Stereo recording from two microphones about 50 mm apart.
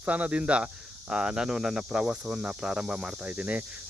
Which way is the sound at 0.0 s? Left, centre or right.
Right.